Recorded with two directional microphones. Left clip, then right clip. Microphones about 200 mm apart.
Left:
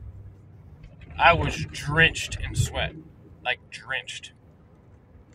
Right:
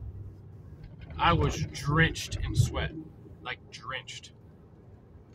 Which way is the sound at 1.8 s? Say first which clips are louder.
Left 7 dB; 20° right (ahead or behind).